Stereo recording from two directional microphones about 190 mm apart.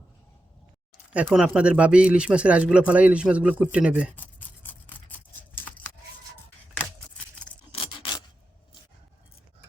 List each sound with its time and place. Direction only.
1.1 s speech: 5° right (ahead or behind)
4.1 s scissors: 10° left (ahead or behind)
7.7 s filing: 25° left (ahead or behind)